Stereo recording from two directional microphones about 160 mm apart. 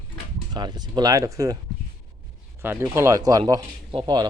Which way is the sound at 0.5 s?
25° right (ahead or behind).